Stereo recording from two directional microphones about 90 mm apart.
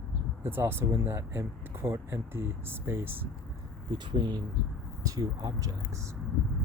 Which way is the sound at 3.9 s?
60° right (ahead or behind).